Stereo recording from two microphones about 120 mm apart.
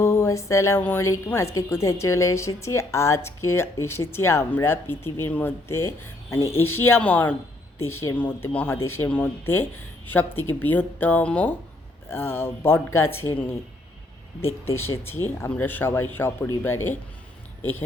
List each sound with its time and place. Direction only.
0.0 s a sound: 25° left (ahead or behind)
0.8 s speech: 20° left (ahead or behind)
15.4 s speech: 15° left (ahead or behind)